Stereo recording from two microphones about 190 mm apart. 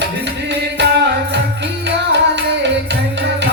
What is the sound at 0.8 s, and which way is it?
Music, 65° right (ahead or behind).